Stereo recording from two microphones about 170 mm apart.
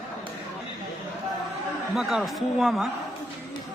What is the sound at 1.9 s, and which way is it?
Speech, centre (ahead or behind).